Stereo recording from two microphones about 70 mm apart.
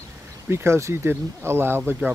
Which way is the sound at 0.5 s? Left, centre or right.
Right.